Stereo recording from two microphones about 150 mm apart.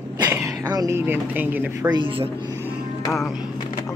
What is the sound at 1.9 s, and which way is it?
Speech, 30° right (ahead or behind).